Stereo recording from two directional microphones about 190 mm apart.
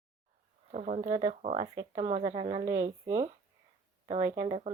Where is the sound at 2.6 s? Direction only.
15° right (ahead or behind).